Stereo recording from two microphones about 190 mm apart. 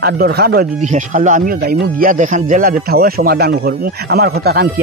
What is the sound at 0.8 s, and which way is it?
Speech, 40° right (ahead or behind).